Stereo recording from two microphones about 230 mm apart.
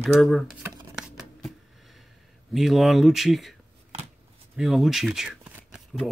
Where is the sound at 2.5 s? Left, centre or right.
Centre.